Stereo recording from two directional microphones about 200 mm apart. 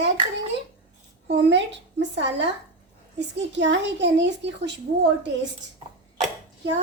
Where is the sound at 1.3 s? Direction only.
60° right (ahead or behind).